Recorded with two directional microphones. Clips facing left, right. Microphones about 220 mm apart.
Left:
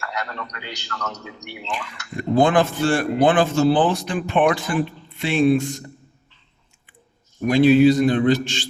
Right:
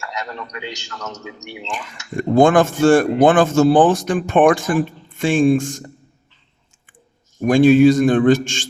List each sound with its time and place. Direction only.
1.7 s a man's voice: 45° right (ahead or behind)
7.4 s a man's voice: 50° right (ahead or behind)